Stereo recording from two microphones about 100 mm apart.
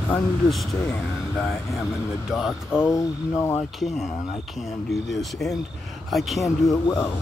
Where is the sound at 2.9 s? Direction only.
25° left (ahead or behind).